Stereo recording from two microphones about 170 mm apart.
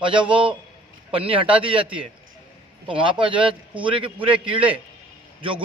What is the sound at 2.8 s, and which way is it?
A man's voice, 30° right (ahead or behind).